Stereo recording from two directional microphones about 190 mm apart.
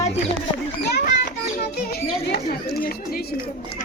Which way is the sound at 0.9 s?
60° left (ahead or behind).